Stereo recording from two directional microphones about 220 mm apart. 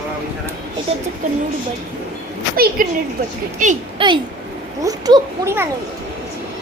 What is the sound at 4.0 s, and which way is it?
A child's voice, 25° right (ahead or behind).